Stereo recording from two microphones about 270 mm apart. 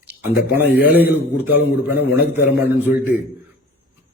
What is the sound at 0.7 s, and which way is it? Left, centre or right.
Speech, left.